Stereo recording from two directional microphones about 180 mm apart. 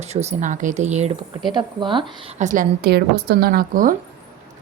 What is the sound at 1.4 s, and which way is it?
Speech, 25° right (ahead or behind).